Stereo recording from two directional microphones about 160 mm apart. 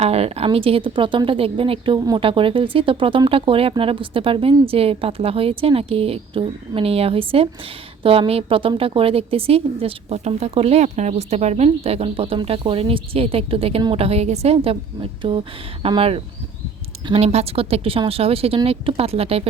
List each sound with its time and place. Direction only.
0.0 s a woman's voice: 40° right (ahead or behind)